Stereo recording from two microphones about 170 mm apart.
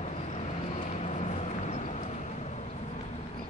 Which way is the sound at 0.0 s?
40° left (ahead or behind).